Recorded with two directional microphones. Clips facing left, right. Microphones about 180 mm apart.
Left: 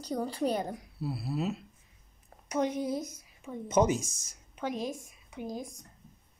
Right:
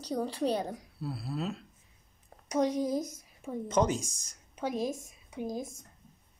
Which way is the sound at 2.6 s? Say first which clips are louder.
Right 2 dB; 40° right (ahead or behind).